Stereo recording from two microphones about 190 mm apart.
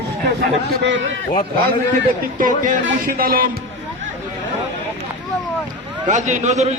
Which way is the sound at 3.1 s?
50° right (ahead or behind).